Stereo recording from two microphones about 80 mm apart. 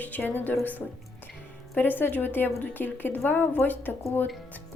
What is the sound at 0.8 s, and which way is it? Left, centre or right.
Speech, left.